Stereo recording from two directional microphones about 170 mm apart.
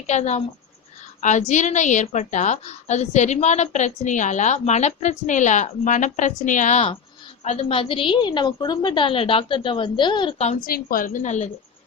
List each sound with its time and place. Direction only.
0.1 s a woman's voice: 40° left (ahead or behind)
7.4 s a woman's voice: 35° left (ahead or behind)
10.7 s a woman's voice: 60° left (ahead or behind)